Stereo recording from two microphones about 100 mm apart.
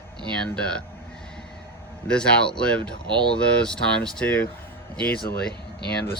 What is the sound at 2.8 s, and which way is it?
Speech, 50° right (ahead or behind).